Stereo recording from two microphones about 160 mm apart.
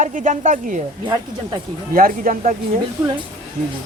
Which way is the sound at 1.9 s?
60° right (ahead or behind).